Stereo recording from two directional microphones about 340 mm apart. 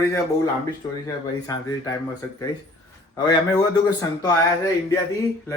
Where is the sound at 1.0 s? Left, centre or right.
Centre.